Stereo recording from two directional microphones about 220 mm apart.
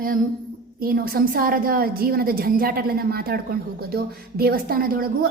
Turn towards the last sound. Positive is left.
turn(degrees=-40)  # may be behind; listen again after turning